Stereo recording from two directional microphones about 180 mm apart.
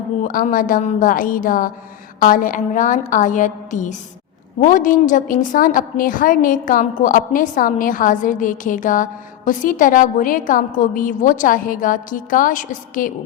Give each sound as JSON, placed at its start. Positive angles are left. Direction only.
{"t": 0.2, "sound": "a woman's voice", "side_deg": 45}